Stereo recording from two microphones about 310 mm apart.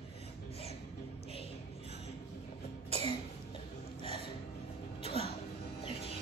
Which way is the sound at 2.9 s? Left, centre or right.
Centre.